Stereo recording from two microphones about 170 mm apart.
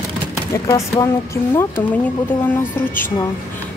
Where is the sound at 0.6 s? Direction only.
20° left (ahead or behind).